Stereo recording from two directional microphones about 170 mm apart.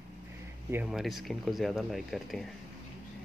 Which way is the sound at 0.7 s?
10° right (ahead or behind).